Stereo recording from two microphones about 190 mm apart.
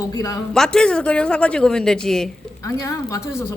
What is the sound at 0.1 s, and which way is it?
Speech, 20° left (ahead or behind).